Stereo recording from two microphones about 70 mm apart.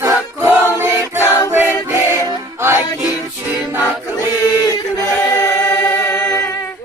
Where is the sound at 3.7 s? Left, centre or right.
Left.